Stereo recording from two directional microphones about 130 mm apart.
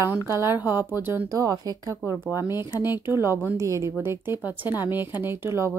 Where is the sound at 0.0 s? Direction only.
20° right (ahead or behind).